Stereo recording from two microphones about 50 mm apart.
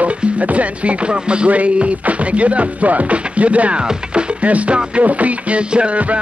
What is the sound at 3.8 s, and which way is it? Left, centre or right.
Music, right.